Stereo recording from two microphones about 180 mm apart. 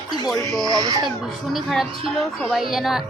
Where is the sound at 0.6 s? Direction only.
20° right (ahead or behind).